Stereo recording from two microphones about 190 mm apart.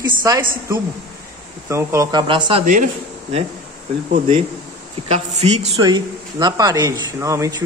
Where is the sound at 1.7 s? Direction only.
15° right (ahead or behind).